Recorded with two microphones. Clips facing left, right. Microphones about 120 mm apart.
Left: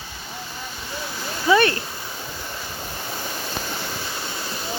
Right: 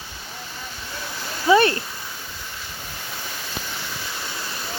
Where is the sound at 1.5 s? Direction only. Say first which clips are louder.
Right 1 dB; 25° right (ahead or behind).